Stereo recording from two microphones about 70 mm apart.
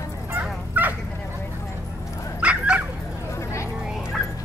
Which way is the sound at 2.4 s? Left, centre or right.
Centre.